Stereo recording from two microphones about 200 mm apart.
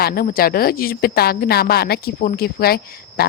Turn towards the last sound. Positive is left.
turn(degrees=50)  # may be behind; listen again after turning